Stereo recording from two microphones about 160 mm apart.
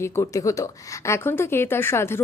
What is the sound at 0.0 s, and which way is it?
Speech, 20° left (ahead or behind).